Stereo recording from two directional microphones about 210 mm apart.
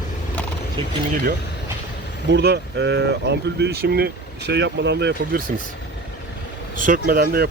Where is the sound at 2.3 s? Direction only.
55° right (ahead or behind).